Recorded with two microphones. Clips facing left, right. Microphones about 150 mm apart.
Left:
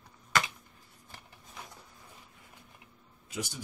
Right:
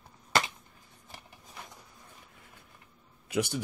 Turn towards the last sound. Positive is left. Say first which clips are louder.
# right 9 dB
turn(degrees=-65)  # may be behind; listen again after turning